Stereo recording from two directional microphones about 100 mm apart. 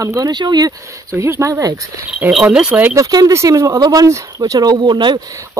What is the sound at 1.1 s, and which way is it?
Speech, 30° right (ahead or behind).